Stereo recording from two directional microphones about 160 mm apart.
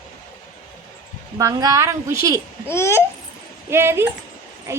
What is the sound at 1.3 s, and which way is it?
A woman's voice, 20° right (ahead or behind).